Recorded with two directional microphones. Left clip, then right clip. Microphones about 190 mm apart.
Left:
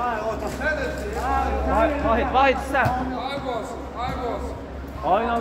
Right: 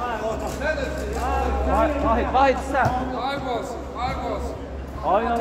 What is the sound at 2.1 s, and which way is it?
Speech, 25° left (ahead or behind).